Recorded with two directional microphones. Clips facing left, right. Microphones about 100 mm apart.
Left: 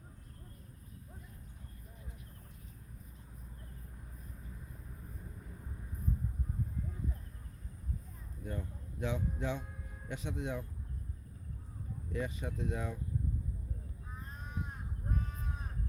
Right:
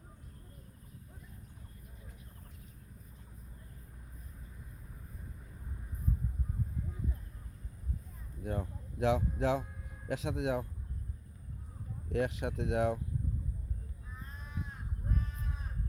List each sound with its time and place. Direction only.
8.4 s speech: 90° right
12.0 s speech: 90° right